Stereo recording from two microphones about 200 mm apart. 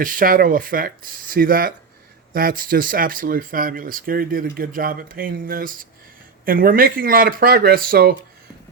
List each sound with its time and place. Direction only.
0.0 s speech: 45° right (ahead or behind)